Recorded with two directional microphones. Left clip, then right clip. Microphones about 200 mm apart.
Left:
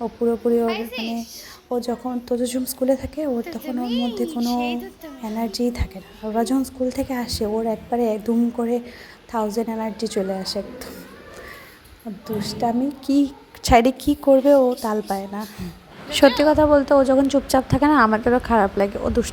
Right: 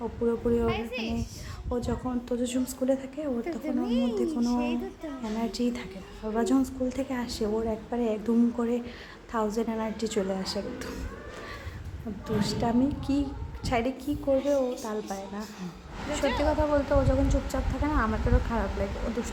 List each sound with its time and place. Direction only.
0.0 s a woman's voice: 20° left (ahead or behind)
0.7 s a child's voice: centre (ahead or behind)
1.7 s a woman's voice: 20° left (ahead or behind)
12.4 s a woman's voice: 20° left (ahead or behind)
13.1 s a woman's voice: 40° left (ahead or behind)
16.4 s a woman's voice: 40° left (ahead or behind)